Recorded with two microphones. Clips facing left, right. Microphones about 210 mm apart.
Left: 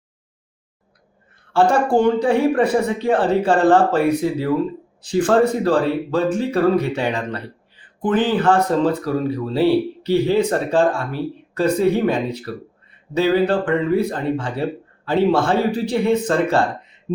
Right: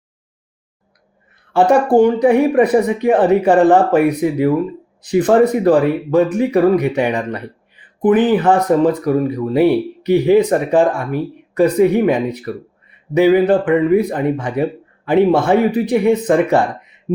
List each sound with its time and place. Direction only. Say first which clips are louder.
1.7 s speech: right 8 dB; 15° right (ahead or behind)